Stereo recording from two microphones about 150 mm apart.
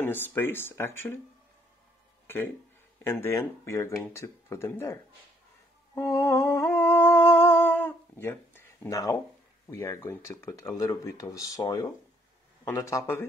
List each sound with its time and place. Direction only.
0.0 s speech: 15° left (ahead or behind)
2.2 s speech: 15° left (ahead or behind)
5.9 s humming: 20° left (ahead or behind)
9.7 s speech: 20° left (ahead or behind)